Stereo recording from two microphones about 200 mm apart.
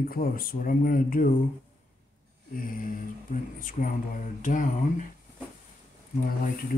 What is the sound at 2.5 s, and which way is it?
Speech, 45° left (ahead or behind).